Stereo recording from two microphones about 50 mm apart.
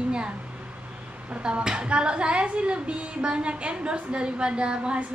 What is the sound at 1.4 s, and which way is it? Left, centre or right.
A woman's voice, centre.